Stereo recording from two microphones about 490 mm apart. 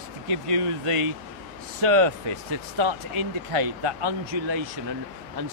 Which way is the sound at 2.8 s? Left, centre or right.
Right.